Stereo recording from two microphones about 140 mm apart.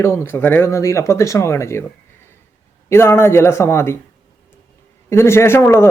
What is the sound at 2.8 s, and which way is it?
Speech, 20° left (ahead or behind).